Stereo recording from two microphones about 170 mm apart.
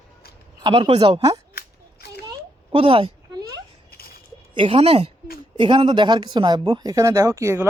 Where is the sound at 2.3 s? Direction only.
30° right (ahead or behind).